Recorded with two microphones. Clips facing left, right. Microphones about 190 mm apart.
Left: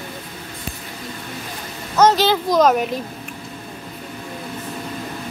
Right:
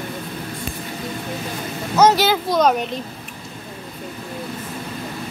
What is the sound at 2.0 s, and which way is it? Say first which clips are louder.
Speech: even; 10° right (ahead or behind).